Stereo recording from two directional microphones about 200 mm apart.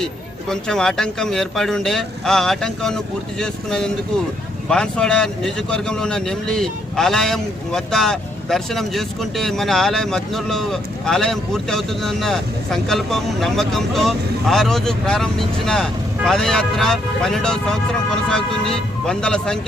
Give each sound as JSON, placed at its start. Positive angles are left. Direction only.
{"t": 0.0, "sound": "speech", "side_deg": 5}